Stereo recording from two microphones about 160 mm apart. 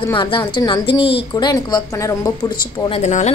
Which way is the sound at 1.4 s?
25° left (ahead or behind).